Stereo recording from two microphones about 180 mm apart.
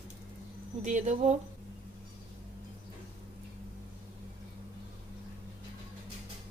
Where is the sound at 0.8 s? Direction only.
45° right (ahead or behind).